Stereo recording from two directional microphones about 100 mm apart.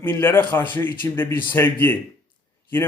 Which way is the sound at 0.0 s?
20° left (ahead or behind).